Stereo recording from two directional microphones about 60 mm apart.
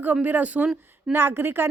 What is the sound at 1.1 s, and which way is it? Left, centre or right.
Speech, right.